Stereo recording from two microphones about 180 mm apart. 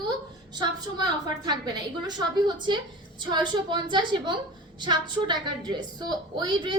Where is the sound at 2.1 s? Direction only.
25° right (ahead or behind).